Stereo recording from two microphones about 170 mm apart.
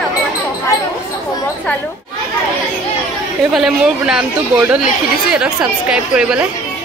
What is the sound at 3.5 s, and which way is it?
Speech, centre (ahead or behind).